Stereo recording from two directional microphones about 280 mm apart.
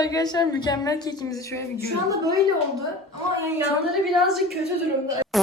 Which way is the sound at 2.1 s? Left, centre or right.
Centre.